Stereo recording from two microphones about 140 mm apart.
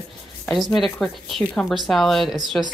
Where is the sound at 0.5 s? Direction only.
Centre (ahead or behind).